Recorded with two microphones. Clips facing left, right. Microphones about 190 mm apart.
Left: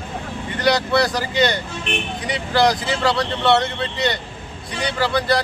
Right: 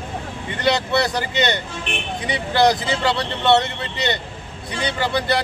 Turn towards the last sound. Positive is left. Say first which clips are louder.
# left 2 dB
turn(degrees=-20)  # may be behind; listen again after turning